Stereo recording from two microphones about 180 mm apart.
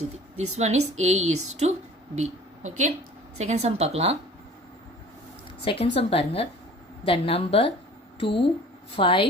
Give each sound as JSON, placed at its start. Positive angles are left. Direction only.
{"t": 0.3, "sound": "speech", "side_deg": -40}
{"t": 5.6, "sound": "a woman's voice", "side_deg": 30}